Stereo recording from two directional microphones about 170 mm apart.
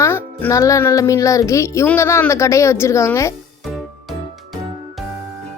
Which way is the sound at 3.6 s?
Centre (ahead or behind).